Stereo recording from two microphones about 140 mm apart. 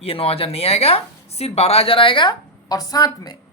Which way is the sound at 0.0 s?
45° left (ahead or behind).